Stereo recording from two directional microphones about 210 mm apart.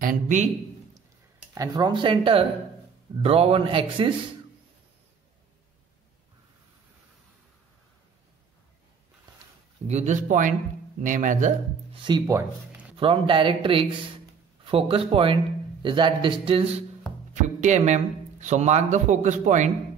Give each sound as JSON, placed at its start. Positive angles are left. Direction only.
{"t": 0.0, "sound": "speech", "side_deg": -40}
{"t": 1.5, "sound": "a man's voice", "side_deg": -15}
{"t": 9.8, "sound": "speech", "side_deg": -35}
{"t": 12.0, "sound": "speech", "side_deg": -15}
{"t": 12.9, "sound": "a man's voice", "side_deg": -25}